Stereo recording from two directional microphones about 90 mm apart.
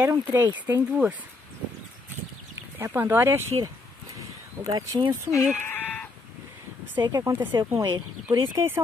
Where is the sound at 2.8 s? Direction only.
20° right (ahead or behind).